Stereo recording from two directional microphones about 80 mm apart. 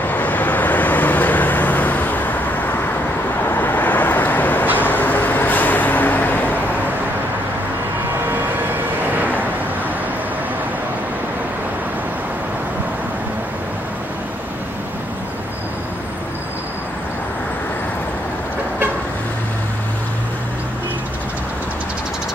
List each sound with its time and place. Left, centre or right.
0.1 s vehicle: left
9.1 s vehicle: right